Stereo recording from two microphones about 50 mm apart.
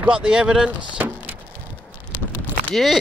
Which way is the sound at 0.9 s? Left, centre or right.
Right.